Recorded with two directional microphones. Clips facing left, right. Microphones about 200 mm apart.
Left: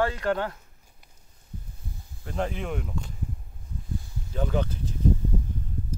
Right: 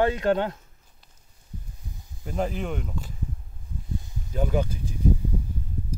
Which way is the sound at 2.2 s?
5° right (ahead or behind).